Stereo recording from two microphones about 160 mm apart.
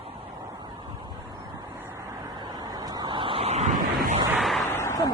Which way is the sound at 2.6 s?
25° right (ahead or behind).